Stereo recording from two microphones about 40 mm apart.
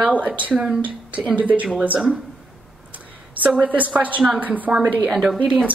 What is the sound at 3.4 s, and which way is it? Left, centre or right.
A woman's voice, right.